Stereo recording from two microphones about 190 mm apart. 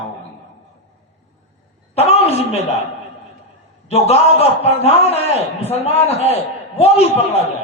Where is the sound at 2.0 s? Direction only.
35° left (ahead or behind).